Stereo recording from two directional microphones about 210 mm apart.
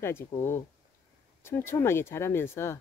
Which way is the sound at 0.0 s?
10° left (ahead or behind).